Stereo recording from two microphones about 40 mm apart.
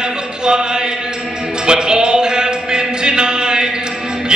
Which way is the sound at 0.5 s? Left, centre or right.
Centre.